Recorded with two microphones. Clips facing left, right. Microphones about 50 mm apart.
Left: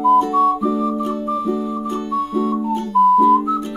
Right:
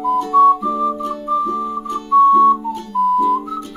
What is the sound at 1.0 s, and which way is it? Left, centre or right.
Music, centre.